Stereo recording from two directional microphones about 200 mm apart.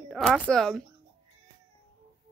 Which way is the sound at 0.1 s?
Centre (ahead or behind).